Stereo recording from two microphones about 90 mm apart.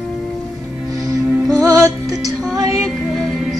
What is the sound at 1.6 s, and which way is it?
Music, 40° right (ahead or behind).